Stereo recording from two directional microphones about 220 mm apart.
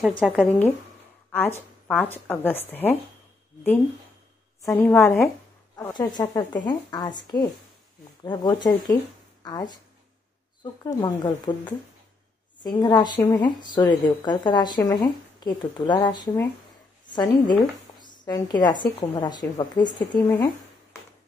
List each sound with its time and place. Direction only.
0.2 s a woman's voice: centre (ahead or behind)
1.9 s a woman's voice: 5° left (ahead or behind)
4.6 s a woman's voice: 5° left (ahead or behind)
5.8 s a woman's voice: 15° left (ahead or behind)
12.6 s a woman's voice: 20° left (ahead or behind)